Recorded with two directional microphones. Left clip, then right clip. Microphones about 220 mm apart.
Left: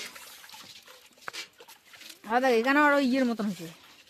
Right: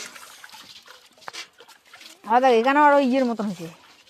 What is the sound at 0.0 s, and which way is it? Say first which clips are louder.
Water: right 3 dB; 5° right (ahead or behind).